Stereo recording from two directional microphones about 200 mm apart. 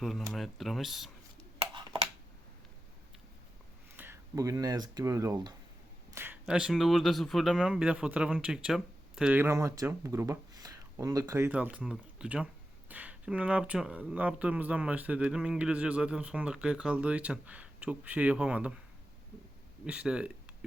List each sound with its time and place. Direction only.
0.0 s speech: centre (ahead or behind)
1.5 s a sound: 25° right (ahead or behind)
3.9 s speech: 10° right (ahead or behind)
6.1 s speech: 10° right (ahead or behind)
19.8 s speech: 5° right (ahead or behind)